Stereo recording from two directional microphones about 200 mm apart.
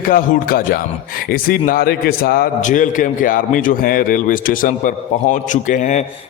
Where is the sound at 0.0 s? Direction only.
45° left (ahead or behind).